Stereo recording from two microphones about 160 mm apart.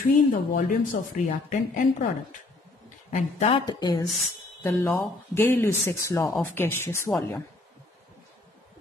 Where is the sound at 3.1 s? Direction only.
45° left (ahead or behind).